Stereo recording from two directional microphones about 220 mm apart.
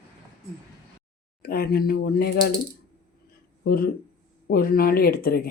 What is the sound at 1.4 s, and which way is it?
Speech, 45° left (ahead or behind).